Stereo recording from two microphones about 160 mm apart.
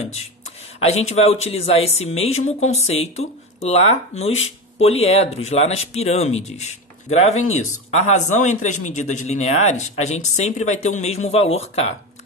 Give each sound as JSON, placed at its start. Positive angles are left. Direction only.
{"t": 0.7, "sound": "speech", "side_deg": 40}